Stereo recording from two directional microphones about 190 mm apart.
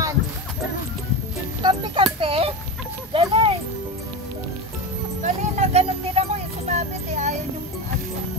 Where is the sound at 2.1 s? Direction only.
30° right (ahead or behind).